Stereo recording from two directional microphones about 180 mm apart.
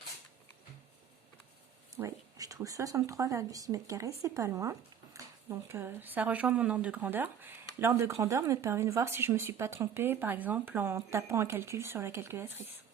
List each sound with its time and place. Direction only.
2.0 s speech: 20° right (ahead or behind)